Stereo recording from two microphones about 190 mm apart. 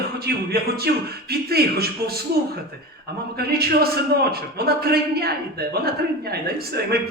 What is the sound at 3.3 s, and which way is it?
Speech, 55° right (ahead or behind).